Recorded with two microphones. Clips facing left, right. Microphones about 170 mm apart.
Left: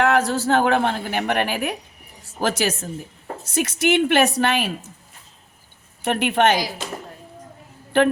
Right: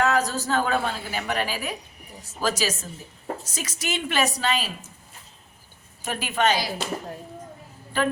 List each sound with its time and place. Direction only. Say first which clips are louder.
0.0 s a woman's voice: left 4 dB; 65° left (ahead or behind)
6.0 s a woman's voice: left 6 dB; 65° left (ahead or behind)